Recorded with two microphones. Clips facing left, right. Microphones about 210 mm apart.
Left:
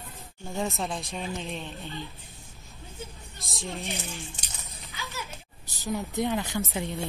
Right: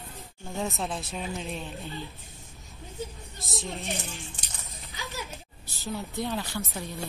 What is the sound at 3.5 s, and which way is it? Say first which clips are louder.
Speech: right 1 dB; centre (ahead or behind).